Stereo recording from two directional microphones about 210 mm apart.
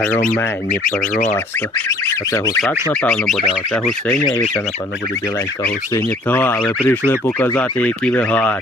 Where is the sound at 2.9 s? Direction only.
5° left (ahead or behind).